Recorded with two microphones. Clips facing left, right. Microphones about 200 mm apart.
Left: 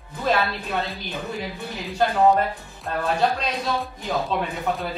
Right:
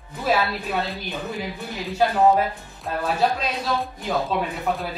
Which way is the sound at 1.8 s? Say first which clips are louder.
Even; 5° right (ahead or behind).